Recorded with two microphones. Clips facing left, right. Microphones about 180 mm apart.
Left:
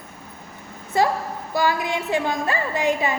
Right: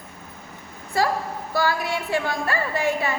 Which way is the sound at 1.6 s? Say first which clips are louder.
Left 2 dB; 20° left (ahead or behind).